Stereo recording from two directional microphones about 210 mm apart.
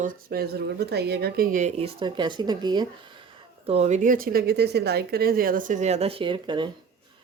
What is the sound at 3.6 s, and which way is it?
A woman's voice, 30° right (ahead or behind).